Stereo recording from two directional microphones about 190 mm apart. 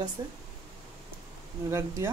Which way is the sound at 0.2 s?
20° right (ahead or behind).